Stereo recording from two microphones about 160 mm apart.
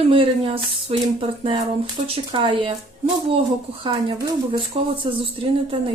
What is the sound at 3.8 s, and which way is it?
A woman's voice, 30° right (ahead or behind).